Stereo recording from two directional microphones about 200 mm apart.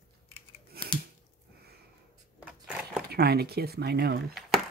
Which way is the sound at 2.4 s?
5° right (ahead or behind).